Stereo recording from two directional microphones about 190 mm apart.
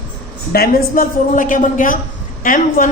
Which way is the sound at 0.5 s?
50° left (ahead or behind).